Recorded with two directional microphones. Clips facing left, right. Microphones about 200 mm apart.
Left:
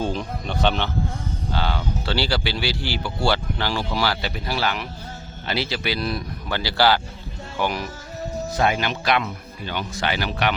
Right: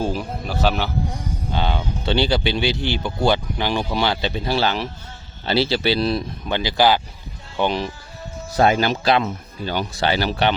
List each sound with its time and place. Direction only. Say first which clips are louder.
0.0 s speech: right 2 dB; 5° right (ahead or behind)
1.5 s speech: right 2 dB; 20° right (ahead or behind)
8.5 s speech: right 6 dB; 35° right (ahead or behind)